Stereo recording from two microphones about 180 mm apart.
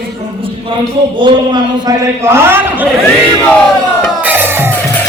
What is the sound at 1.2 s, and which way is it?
Speech, 25° right (ahead or behind).